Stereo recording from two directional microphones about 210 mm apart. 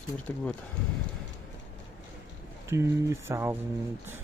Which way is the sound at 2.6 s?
15° right (ahead or behind).